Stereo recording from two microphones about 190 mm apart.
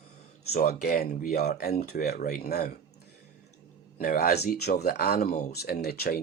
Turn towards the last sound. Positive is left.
turn(degrees=55)  # may be behind; listen again after turning